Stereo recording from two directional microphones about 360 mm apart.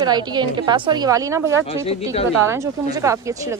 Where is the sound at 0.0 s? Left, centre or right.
Centre.